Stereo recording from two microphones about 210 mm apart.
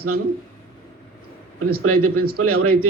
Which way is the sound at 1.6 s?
90° right.